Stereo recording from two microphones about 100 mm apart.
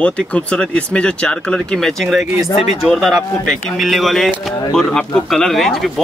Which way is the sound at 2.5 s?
85° left.